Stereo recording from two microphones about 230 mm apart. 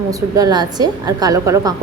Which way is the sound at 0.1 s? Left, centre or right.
Centre.